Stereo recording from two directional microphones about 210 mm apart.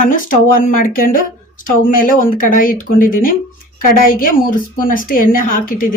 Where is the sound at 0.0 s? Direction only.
40° left (ahead or behind).